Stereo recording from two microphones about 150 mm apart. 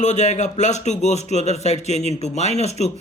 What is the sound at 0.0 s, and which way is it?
Speech, 50° left (ahead or behind).